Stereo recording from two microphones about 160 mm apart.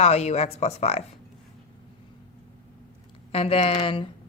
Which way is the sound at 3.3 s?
40° left (ahead or behind).